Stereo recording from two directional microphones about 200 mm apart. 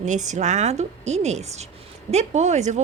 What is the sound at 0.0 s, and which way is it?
A woman's voice, 35° right (ahead or behind).